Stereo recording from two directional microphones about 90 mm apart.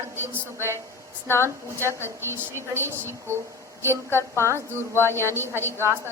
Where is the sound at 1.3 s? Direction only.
25° left (ahead or behind).